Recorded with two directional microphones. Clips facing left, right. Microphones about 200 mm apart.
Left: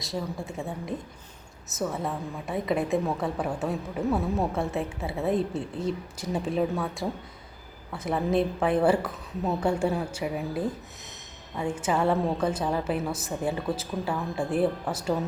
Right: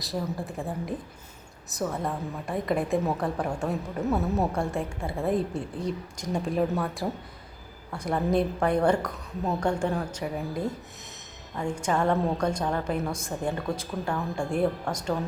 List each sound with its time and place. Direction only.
0.0 s a woman's voice: centre (ahead or behind)